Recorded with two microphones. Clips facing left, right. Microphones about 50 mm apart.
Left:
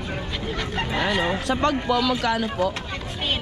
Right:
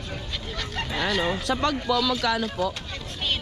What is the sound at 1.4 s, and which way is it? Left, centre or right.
A man's voice, left.